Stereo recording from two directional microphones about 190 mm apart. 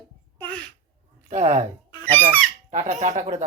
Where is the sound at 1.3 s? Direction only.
35° right (ahead or behind).